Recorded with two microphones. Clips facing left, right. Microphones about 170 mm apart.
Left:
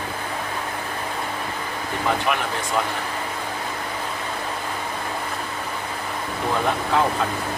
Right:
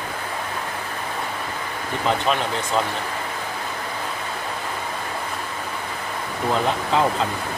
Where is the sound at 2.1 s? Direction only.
25° right (ahead or behind).